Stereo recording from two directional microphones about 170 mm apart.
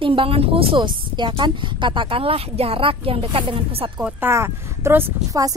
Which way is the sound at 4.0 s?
15° right (ahead or behind).